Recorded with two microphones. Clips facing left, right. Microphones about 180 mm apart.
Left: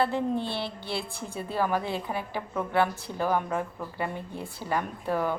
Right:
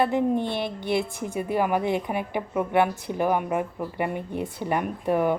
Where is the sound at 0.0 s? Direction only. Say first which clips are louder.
Right 4 dB; 15° right (ahead or behind).